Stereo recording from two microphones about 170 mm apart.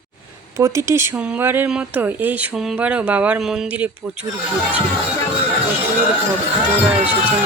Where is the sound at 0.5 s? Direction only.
15° right (ahead or behind).